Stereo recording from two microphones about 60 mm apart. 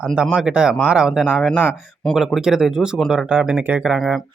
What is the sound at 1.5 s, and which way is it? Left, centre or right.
Speech, centre.